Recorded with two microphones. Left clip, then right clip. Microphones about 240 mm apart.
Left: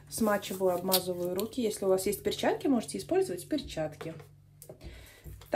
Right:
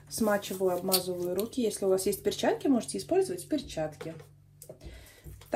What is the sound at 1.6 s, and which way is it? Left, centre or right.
Speech, left.